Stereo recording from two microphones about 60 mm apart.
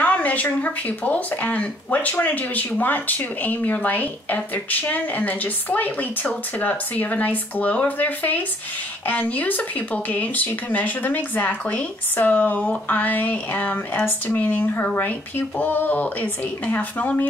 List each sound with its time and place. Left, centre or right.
0.0 s speech: left